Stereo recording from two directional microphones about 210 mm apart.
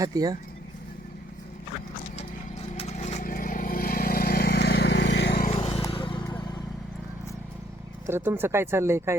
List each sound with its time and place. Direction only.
0.0 s speech: 15° right (ahead or behind)
2.7 s vehicle: 30° left (ahead or behind)
8.0 s speech: 10° right (ahead or behind)